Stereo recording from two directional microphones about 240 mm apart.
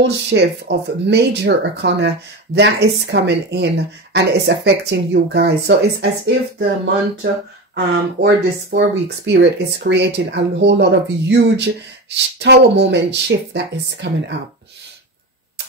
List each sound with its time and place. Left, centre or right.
0.0 s speech: right
7.7 s speech: right